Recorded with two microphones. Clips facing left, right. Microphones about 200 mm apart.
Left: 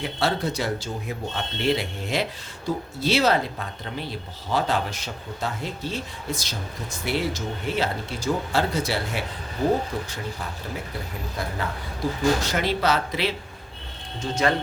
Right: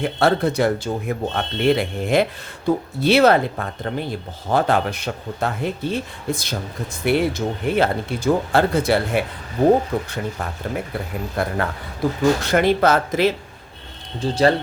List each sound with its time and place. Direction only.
0.0 s speech: 55° right (ahead or behind)
11.3 s speech: 60° right (ahead or behind)
14.2 s speech: 35° right (ahead or behind)